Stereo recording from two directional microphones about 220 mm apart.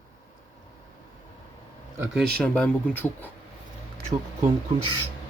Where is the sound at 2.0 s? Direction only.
Centre (ahead or behind).